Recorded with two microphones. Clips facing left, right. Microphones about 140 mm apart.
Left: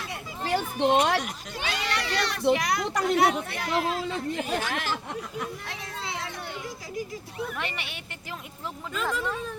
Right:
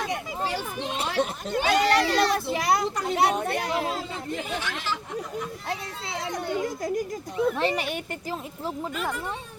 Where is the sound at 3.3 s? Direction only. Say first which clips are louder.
Right 6 dB; 50° right (ahead or behind).